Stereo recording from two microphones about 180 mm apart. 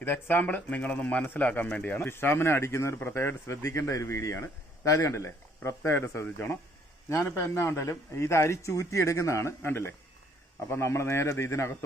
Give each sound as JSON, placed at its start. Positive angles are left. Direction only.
{"t": 0.0, "sound": "speech", "side_deg": 10}